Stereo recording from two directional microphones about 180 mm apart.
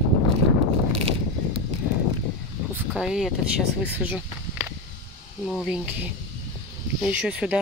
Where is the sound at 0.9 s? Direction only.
35° right (ahead or behind).